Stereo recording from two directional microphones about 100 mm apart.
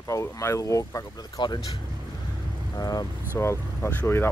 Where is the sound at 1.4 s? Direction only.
45° left (ahead or behind).